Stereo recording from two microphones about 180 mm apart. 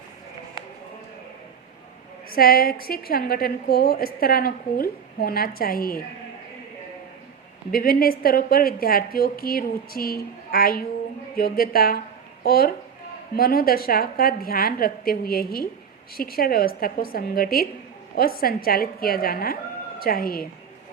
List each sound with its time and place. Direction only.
2.3 s a woman's voice: 55° left (ahead or behind)
7.7 s a woman's voice: 55° left (ahead or behind)